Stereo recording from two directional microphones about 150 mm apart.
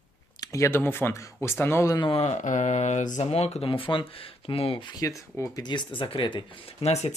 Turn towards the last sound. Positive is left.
turn(degrees=45)  # may be behind; listen again after turning